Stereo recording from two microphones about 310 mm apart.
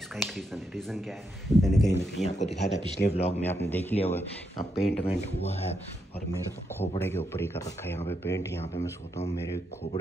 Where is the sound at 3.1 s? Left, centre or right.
Centre.